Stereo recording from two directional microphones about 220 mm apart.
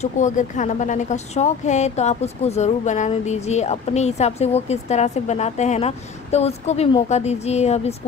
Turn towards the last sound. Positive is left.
turn(degrees=30)  # may be behind; listen again after turning